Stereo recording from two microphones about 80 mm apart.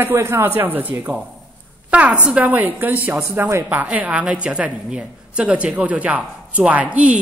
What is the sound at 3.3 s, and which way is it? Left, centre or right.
Speech, right.